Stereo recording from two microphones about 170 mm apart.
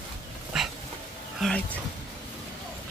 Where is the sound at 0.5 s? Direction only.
5° right (ahead or behind).